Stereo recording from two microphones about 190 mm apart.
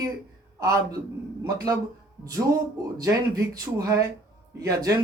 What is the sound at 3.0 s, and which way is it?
A man's voice, 20° right (ahead or behind).